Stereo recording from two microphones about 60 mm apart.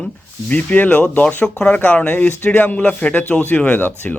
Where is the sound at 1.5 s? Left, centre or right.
Centre.